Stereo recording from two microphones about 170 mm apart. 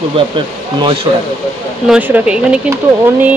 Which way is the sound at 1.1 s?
25° right (ahead or behind).